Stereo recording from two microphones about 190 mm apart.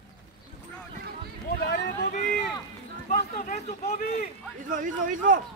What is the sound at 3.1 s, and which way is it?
Speech, 40° left (ahead or behind).